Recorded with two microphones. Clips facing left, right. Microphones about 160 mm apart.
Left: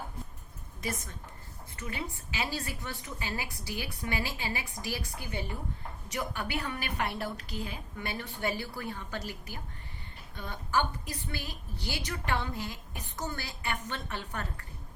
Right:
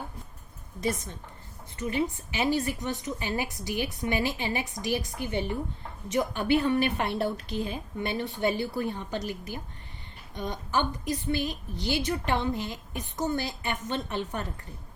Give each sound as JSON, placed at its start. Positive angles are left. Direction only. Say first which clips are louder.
{"t": 0.8, "sound": "a woman's voice", "louder": "right 7 dB", "side_deg": -25}